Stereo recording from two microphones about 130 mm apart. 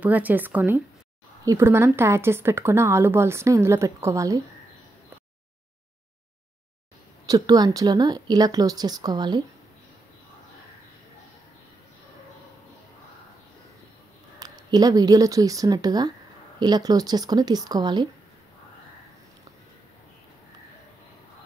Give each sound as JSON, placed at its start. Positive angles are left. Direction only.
{"t": 0.0, "sound": "speech", "side_deg": -15}
{"t": 7.2, "sound": "speech", "side_deg": -30}
{"t": 14.4, "sound": "speech", "side_deg": -30}